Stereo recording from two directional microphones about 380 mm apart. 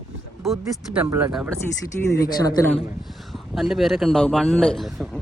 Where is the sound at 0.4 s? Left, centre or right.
Centre.